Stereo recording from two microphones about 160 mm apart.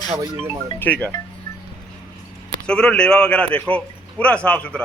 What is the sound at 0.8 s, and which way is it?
Speech, 10° left (ahead or behind).